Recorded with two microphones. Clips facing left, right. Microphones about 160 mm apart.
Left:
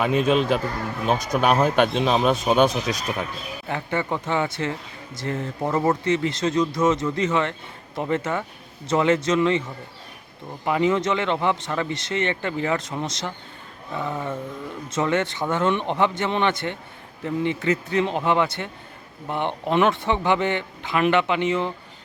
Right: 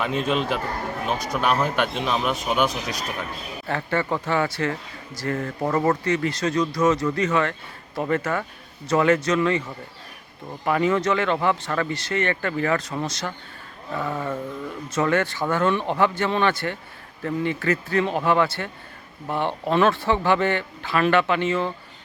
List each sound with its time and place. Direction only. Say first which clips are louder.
0.0 s speech: left 4 dB; 15° left (ahead or behind)
10.7 s speech: even; 20° left (ahead or behind)